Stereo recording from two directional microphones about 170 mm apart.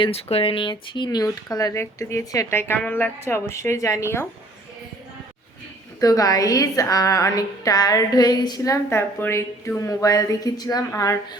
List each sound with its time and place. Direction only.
0.0 s a woman's voice: 35° left (ahead or behind); by 4.3 s 15° left (ahead or behind)
6.0 s a woman's voice: 20° left (ahead or behind)